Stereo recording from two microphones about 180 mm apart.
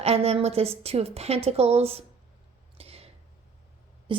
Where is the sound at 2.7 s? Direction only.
35° right (ahead or behind).